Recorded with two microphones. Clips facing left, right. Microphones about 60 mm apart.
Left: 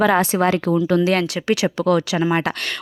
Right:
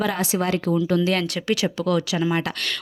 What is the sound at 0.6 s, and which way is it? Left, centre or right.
Speech, left.